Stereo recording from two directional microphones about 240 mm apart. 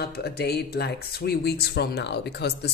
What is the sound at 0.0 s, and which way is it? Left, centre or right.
Speech, left.